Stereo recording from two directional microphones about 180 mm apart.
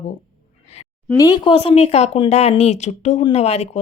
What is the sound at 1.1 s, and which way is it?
Speech, 20° left (ahead or behind).